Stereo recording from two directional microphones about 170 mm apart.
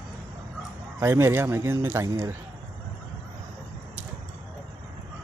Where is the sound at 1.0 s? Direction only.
15° right (ahead or behind).